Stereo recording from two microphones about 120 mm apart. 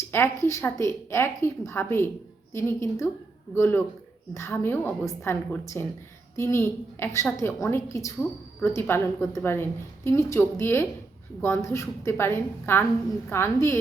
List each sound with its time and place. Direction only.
0.1 s speech: 20° left (ahead or behind)